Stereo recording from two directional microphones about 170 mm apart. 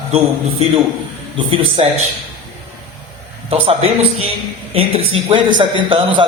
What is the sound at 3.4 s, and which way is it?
A man's voice, 35° right (ahead or behind).